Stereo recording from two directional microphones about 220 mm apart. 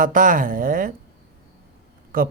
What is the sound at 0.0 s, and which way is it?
Speech, 40° right (ahead or behind).